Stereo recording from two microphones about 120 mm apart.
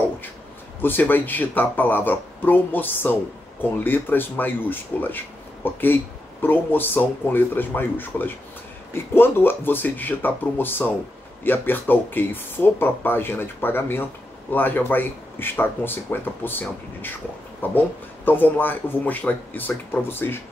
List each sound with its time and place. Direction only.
0.7 s speech: 15° left (ahead or behind)